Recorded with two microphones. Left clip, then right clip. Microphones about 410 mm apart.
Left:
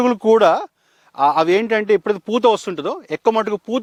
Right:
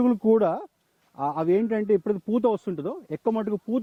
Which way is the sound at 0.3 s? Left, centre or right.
Centre.